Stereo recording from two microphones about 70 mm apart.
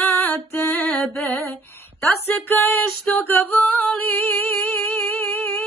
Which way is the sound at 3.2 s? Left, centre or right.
Left.